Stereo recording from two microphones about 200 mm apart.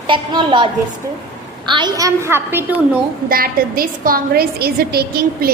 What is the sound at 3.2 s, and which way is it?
A woman's voice, 45° right (ahead or behind).